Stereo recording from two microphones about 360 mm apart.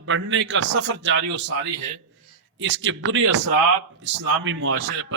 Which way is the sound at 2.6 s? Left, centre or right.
Right.